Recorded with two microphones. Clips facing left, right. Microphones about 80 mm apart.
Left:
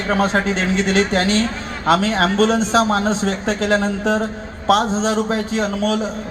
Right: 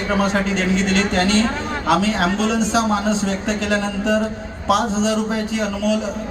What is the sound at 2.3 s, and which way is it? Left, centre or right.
A man's voice, left.